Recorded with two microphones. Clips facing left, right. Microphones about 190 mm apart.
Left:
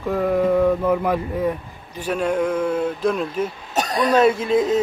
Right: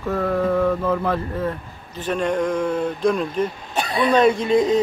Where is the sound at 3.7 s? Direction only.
40° left (ahead or behind).